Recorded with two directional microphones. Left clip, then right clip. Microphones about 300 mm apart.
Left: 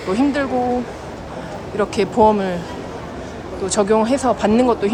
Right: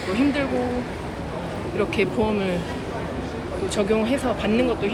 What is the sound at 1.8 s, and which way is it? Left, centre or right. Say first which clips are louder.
Speech: left 8 dB; centre.